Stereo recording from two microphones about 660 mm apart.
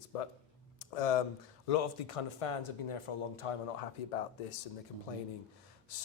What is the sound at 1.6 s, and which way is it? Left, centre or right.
Speech, left.